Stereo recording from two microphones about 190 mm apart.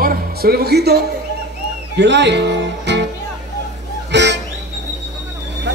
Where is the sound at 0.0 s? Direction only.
50° right (ahead or behind).